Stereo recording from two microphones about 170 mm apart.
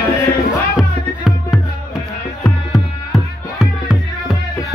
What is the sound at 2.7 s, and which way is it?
Music, centre (ahead or behind).